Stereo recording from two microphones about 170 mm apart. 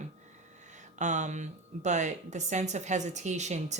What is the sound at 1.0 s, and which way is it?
A woman's voice, 45° right (ahead or behind).